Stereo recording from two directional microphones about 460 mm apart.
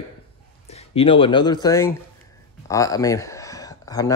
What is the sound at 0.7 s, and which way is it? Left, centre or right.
Speech, centre.